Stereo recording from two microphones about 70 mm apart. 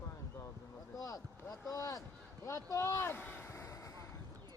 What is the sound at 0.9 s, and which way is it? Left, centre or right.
Boat, left.